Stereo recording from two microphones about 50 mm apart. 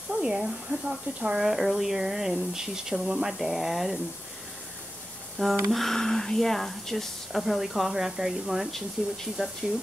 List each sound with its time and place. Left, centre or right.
0.1 s a sound: centre
0.7 s speech: centre
1.4 s speech: centre
5.7 s speech: centre